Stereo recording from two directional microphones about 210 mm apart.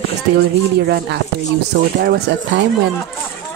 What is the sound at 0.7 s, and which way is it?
Speech, 50° right (ahead or behind).